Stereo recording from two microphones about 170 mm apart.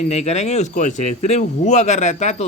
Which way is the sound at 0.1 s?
40° left (ahead or behind).